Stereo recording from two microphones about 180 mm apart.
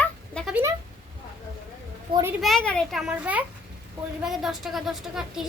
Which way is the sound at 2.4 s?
5° left (ahead or behind).